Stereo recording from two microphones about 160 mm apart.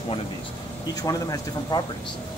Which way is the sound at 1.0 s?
20° left (ahead or behind).